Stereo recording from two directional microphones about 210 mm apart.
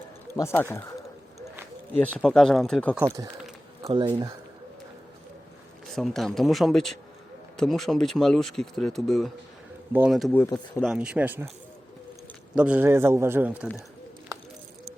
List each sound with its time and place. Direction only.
0.3 s speech: 10° left (ahead or behind)
2.0 s speech: 5° left (ahead or behind)
3.8 s speech: 20° right (ahead or behind)
5.9 s speech: centre (ahead or behind)
12.5 s a man's voice: 5° right (ahead or behind)